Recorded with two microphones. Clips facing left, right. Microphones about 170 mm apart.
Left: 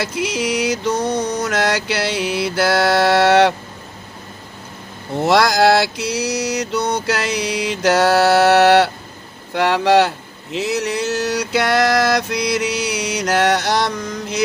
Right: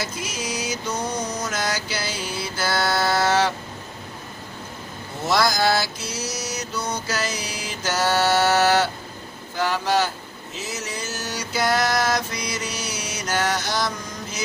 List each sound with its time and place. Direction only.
0.0 s mantra: 70° left (ahead or behind)
5.2 s mantra: 70° left (ahead or behind)